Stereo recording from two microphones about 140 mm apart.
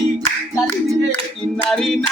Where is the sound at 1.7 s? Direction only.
Centre (ahead or behind).